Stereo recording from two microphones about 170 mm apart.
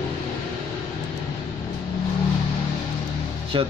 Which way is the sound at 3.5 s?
30° right (ahead or behind).